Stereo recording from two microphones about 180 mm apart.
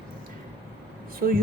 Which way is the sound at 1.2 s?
55° right (ahead or behind).